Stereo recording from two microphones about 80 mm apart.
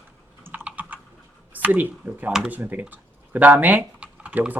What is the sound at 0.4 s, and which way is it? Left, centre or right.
Typing, right.